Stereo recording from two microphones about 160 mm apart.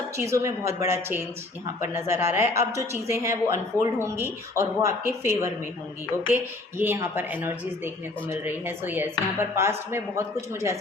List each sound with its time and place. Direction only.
0.2 s speech: 20° right (ahead or behind)